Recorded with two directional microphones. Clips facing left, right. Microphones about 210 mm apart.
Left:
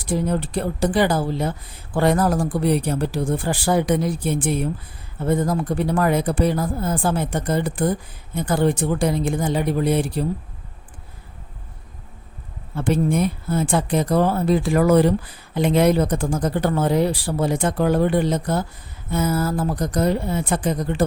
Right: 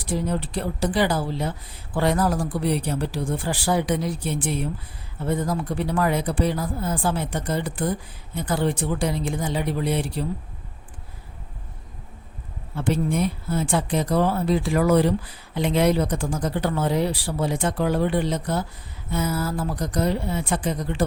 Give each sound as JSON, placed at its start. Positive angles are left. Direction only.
{"t": 0.1, "sound": "speech", "side_deg": 50}
{"t": 12.7, "sound": "speech", "side_deg": 50}